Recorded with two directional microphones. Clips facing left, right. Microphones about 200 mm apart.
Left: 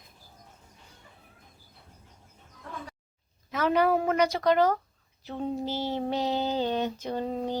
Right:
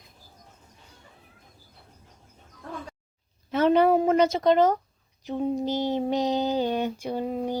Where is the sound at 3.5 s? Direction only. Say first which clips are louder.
Right 5 dB; 25° right (ahead or behind).